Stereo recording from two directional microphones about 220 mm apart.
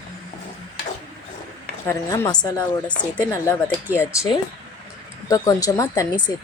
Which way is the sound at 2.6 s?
5° left (ahead or behind).